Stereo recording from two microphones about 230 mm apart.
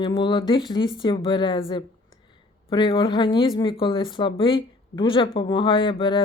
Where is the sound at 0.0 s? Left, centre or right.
Left.